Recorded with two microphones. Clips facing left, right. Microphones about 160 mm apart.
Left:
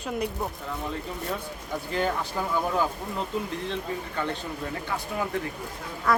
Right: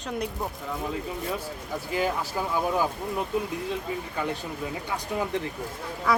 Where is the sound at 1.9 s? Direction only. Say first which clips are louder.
Even; 5° right (ahead or behind).